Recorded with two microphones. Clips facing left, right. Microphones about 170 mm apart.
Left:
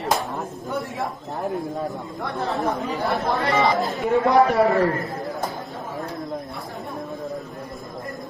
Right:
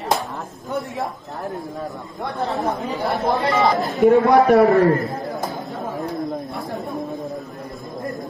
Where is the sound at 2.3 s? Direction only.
Centre (ahead or behind).